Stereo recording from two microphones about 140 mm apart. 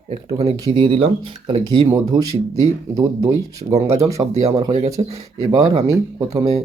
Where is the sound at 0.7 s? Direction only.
40° right (ahead or behind).